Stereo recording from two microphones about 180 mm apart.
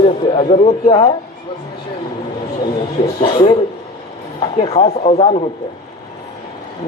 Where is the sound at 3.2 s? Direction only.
25° left (ahead or behind).